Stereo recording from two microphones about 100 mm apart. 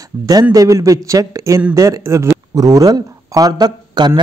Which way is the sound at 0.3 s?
40° right (ahead or behind).